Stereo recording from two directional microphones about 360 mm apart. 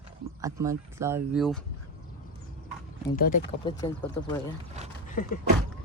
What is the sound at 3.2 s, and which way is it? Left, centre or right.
Speech, left.